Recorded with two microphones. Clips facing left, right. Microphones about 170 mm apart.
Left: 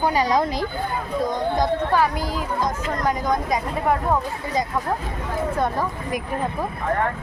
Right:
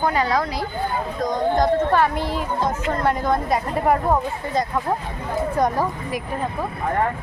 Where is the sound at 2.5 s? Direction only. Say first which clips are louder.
Right 2 dB; 30° right (ahead or behind).